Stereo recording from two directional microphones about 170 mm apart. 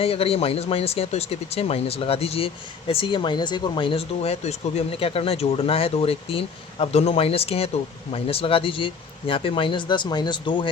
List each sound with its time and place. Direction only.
0.0 s speech: 35° left (ahead or behind)